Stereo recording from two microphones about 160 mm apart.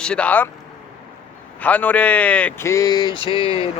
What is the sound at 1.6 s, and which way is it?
A man's voice, 10° left (ahead or behind).